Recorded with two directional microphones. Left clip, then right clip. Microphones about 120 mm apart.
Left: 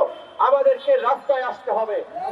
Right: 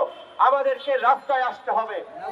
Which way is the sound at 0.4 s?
35° right (ahead or behind).